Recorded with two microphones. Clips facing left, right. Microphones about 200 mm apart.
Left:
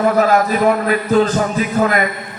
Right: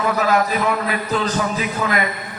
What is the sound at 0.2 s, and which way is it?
A man's voice, 45° left (ahead or behind).